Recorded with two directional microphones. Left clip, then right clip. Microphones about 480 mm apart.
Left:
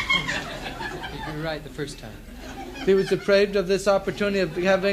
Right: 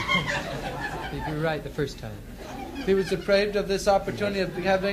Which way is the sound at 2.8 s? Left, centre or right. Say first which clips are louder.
Left 4 dB; centre.